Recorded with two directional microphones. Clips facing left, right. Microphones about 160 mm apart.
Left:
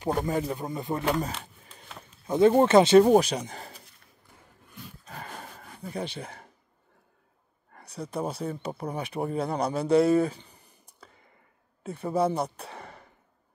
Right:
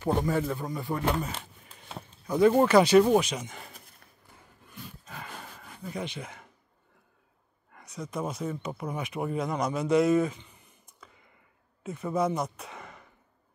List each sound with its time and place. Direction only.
0.0 s speech: 15° left (ahead or behind)
2.2 s speech: 25° left (ahead or behind)
3.0 s speech: 35° left (ahead or behind)
5.0 s dog: 40° left (ahead or behind)
5.9 s speech: 35° left (ahead or behind)
7.7 s speech: 35° left (ahead or behind)